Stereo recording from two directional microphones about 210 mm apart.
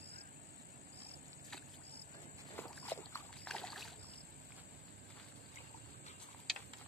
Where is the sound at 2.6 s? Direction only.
10° left (ahead or behind).